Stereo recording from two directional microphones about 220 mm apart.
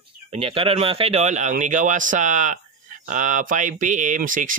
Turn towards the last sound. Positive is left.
turn(degrees=-35)  # may be behind; listen again after turning